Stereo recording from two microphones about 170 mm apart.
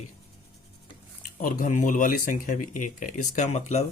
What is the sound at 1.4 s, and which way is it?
Speech, 50° left (ahead or behind).